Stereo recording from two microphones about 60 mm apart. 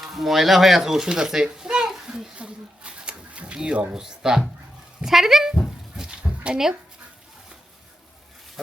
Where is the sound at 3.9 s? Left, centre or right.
Centre.